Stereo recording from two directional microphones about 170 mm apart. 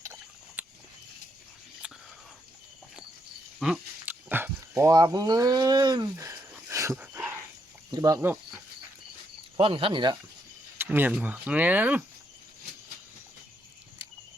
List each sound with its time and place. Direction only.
0.0 s a sound: 15° right (ahead or behind)
1.8 s a sound: 5° right (ahead or behind)
3.6 s speech: 5° right (ahead or behind)
6.5 s dog: 15° right (ahead or behind)
7.9 s speech: 20° right (ahead or behind)
9.6 s speech: 30° right (ahead or behind)
10.8 s speech: 10° right (ahead or behind)